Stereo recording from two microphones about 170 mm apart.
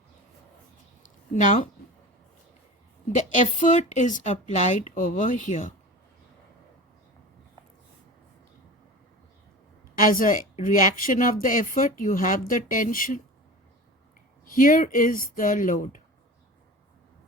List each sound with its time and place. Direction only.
1.0 s a sound: 50° left (ahead or behind)
3.2 s speech: 45° left (ahead or behind)
10.0 s speech: 55° left (ahead or behind)
14.4 s speech: 55° left (ahead or behind)